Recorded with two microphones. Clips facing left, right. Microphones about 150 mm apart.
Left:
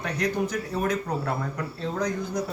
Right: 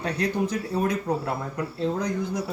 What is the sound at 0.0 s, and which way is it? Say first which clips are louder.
Speech: right 1 dB; 30° right (ahead or behind).